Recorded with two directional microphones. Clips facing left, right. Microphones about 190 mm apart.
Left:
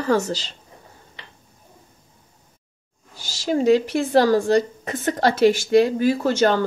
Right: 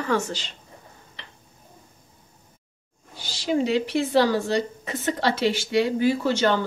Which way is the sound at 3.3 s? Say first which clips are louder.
Left 6 dB; 45° left (ahead or behind).